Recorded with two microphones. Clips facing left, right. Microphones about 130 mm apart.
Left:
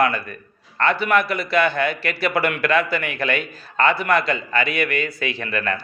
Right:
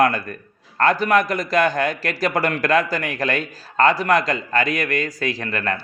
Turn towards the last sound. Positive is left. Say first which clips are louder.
# right 1 dB
turn(degrees=-35)  # may be behind; listen again after turning